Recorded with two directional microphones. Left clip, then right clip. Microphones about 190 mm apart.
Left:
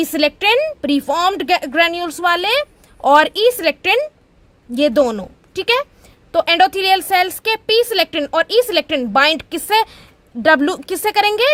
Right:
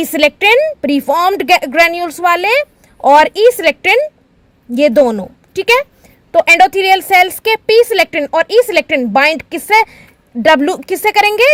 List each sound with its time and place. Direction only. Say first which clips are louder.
0.0 s a woman's voice: right 5 dB; 20° right (ahead or behind)